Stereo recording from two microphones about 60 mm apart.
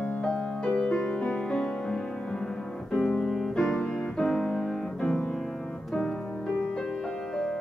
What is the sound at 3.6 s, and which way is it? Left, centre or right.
Piano, centre.